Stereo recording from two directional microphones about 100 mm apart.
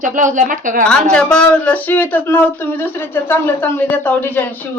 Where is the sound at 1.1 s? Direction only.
10° left (ahead or behind).